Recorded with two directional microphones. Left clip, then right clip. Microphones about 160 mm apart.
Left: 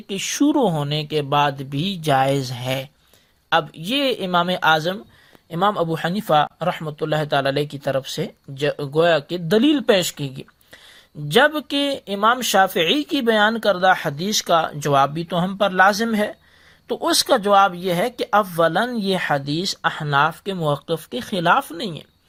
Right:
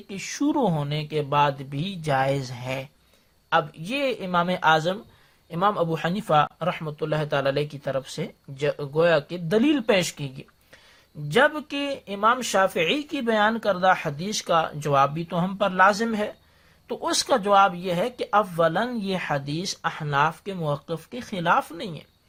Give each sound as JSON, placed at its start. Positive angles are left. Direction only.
{"t": 0.1, "sound": "speech", "side_deg": 40}